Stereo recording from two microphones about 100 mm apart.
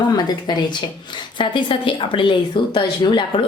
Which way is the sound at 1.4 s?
55° left (ahead or behind).